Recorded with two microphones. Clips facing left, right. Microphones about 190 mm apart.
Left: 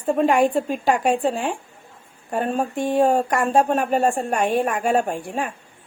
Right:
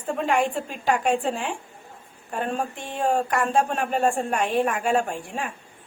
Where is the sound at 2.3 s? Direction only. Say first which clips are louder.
Left 5 dB; 45° left (ahead or behind).